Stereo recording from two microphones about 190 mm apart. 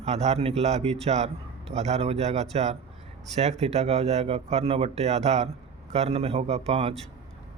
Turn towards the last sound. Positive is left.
turn(degrees=-35)  # may be behind; listen again after turning